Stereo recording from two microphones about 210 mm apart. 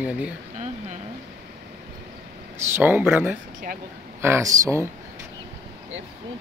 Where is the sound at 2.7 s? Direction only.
10° right (ahead or behind).